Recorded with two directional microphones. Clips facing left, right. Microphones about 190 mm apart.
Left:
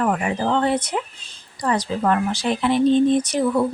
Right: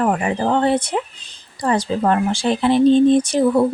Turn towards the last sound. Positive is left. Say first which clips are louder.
# right 4 dB
turn(degrees=-30)  # may be behind; listen again after turning